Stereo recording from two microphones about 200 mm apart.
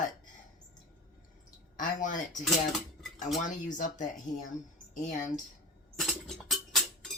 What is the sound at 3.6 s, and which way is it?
Cutlery, 40° left (ahead or behind).